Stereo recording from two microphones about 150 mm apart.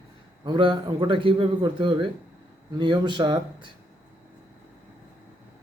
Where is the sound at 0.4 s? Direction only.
35° right (ahead or behind).